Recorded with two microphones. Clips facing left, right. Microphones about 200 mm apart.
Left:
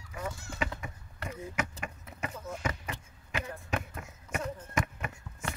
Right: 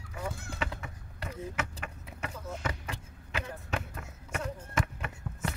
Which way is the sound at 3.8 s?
10° left (ahead or behind).